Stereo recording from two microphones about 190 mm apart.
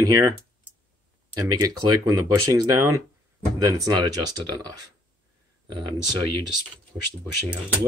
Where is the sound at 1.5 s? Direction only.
20° right (ahead or behind).